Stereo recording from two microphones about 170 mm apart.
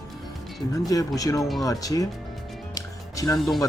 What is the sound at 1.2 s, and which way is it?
Speech, 20° left (ahead or behind).